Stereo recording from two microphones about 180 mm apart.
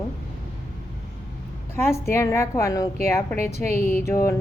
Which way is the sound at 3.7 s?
55° left (ahead or behind).